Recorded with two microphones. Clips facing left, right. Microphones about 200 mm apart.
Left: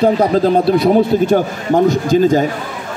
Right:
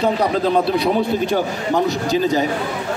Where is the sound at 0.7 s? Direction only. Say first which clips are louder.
Left 6 dB; 45° left (ahead or behind).